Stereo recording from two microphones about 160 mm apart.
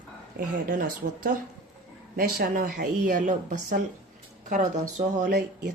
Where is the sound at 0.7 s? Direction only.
60° right (ahead or behind).